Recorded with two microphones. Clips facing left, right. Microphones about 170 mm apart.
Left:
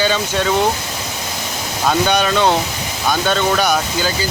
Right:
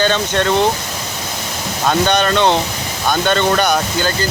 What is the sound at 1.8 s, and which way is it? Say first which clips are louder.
Speech: right 1 dB; 5° left (ahead or behind).